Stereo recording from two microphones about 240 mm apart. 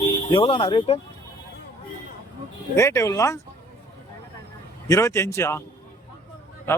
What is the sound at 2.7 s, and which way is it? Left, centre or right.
Speech, centre.